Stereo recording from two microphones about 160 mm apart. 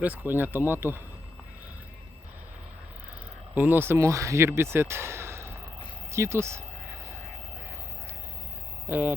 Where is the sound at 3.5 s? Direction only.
10° right (ahead or behind).